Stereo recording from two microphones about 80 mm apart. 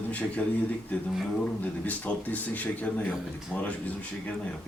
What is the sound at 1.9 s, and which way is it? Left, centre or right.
Speech, centre.